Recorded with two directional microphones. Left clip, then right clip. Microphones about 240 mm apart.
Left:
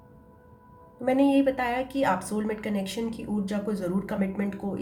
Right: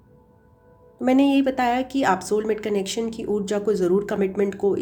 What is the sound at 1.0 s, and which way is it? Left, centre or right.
Speech, right.